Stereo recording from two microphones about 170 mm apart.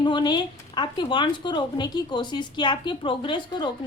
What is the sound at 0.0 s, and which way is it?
Speech, 25° left (ahead or behind).